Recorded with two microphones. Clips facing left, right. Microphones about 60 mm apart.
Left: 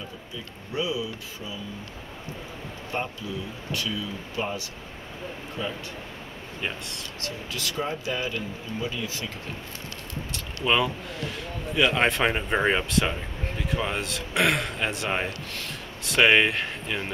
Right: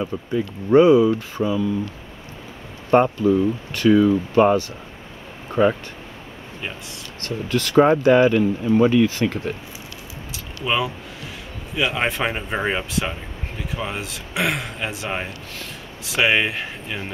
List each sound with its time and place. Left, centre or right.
0.0 s speech: right
2.9 s speech: right
7.2 s speech: right
10.3 s speech: centre